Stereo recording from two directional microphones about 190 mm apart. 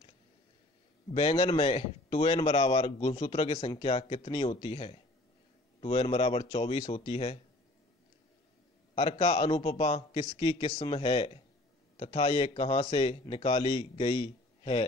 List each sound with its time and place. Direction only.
1.1 s speech: 25° left (ahead or behind)
8.9 s speech: 30° left (ahead or behind)